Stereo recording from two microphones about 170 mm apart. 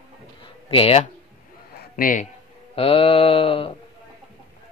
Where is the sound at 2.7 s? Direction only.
35° left (ahead or behind).